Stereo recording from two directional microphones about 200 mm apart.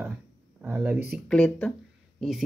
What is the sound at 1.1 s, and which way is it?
Speech, 5° left (ahead or behind).